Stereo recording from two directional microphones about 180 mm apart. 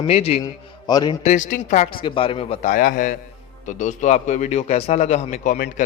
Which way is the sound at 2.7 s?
50° left (ahead or behind).